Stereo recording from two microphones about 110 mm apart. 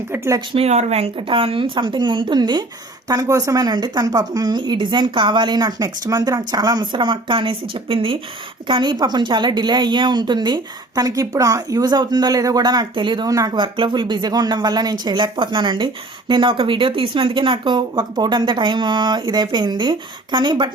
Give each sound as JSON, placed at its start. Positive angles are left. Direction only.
{"t": 0.1, "sound": "speech", "side_deg": -30}
{"t": 0.5, "sound": "speech", "side_deg": -80}
{"t": 1.3, "sound": "speech", "side_deg": -55}
{"t": 13.6, "sound": "speech", "side_deg": -45}